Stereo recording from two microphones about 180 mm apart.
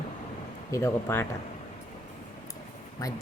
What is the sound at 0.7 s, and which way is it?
Speech, 15° left (ahead or behind).